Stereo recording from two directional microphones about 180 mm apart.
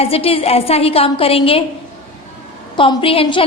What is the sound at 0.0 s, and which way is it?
A woman's voice, 30° left (ahead or behind).